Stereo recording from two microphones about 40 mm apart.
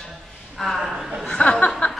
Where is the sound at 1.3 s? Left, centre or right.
Left.